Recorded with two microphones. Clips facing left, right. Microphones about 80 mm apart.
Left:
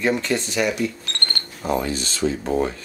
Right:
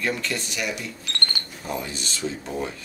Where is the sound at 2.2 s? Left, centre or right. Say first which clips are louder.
Left 8 dB; left.